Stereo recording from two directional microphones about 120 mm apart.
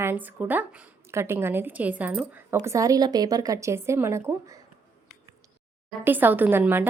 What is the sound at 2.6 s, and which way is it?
Speech, 25° right (ahead or behind).